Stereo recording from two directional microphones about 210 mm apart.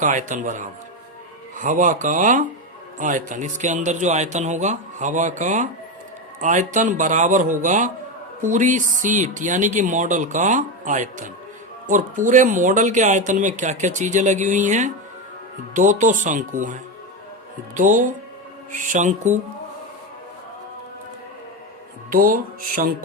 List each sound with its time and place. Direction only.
0.0 s speech: 35° right (ahead or behind)
22.1 s speech: 40° right (ahead or behind)